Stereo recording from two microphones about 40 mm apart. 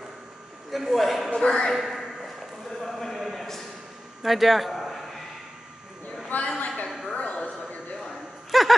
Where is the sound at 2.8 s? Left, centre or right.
Centre.